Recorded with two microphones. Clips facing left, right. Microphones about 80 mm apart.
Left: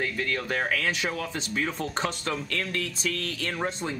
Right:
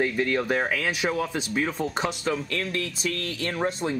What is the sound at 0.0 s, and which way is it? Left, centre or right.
Speech, centre.